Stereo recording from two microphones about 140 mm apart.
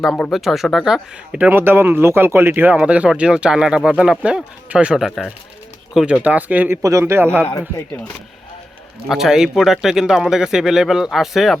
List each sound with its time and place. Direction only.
0.0 s speech: centre (ahead or behind); by 7.4 s 15° right (ahead or behind)
9.0 s speech: 5° right (ahead or behind)